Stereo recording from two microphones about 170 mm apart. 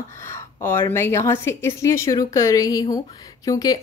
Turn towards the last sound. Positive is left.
turn(degrees=20)  # may be behind; listen again after turning